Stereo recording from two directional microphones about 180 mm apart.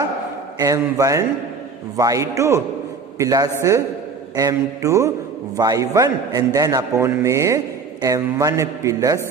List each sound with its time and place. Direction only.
0.6 s a man's voice: 20° right (ahead or behind)